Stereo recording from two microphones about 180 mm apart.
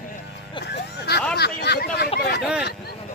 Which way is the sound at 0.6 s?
65° left (ahead or behind).